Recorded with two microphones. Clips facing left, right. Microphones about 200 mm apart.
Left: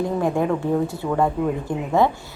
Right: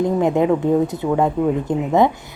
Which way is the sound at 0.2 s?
20° right (ahead or behind).